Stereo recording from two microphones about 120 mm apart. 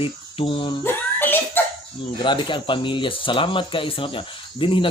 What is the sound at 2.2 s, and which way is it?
Speech, 40° left (ahead or behind).